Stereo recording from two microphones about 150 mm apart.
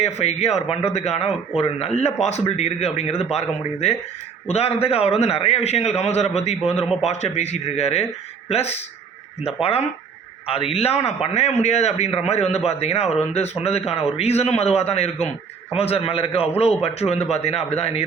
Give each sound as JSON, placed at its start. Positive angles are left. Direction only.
{"t": 0.0, "sound": "a man's voice", "side_deg": 45}